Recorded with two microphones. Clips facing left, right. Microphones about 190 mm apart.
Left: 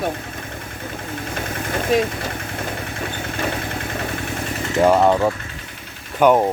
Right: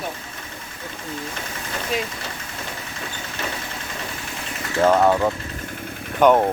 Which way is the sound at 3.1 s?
55° left (ahead or behind).